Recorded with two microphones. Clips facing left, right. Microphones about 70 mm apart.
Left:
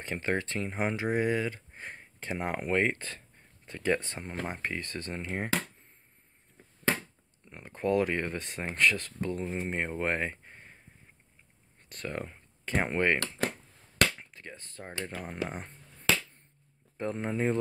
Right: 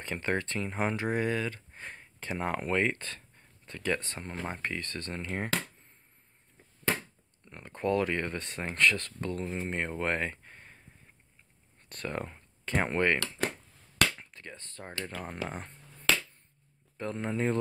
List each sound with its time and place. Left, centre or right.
0.0 s speech: centre
7.4 s speech: centre
11.9 s speech: centre
16.9 s speech: centre